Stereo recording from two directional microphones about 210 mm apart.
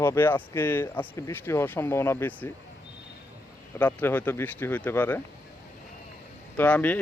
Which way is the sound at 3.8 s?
10° left (ahead or behind).